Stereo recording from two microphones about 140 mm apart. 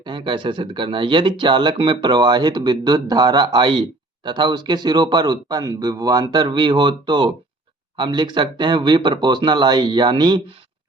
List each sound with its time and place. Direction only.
0.0 s speech: 35° right (ahead or behind)